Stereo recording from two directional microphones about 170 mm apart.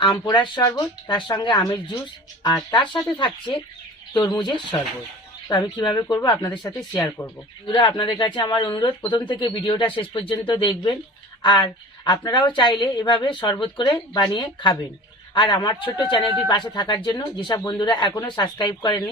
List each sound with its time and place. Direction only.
0.0 s a woman's voice: 25° left (ahead or behind)